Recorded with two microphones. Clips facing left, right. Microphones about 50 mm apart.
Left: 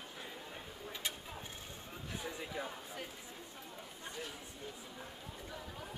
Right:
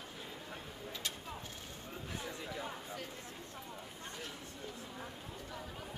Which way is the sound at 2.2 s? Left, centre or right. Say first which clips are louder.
Left 2 dB; centre.